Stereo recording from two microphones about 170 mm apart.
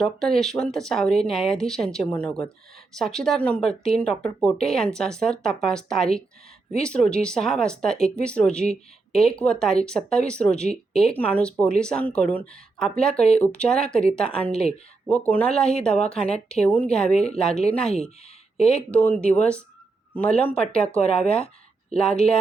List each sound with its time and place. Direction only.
0.0 s speech: centre (ahead or behind)
16.1 s a woman's voice: 35° left (ahead or behind)
16.5 s speech: 5° left (ahead or behind)